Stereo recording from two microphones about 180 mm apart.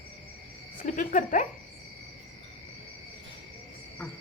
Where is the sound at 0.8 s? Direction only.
45° left (ahead or behind).